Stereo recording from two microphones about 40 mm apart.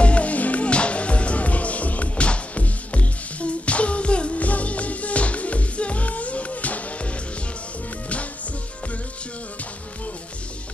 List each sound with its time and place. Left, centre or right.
0.0 s music: left